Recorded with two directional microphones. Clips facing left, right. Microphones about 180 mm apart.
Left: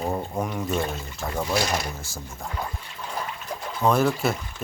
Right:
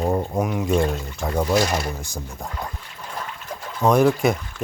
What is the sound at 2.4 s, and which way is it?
Speech, 15° right (ahead or behind).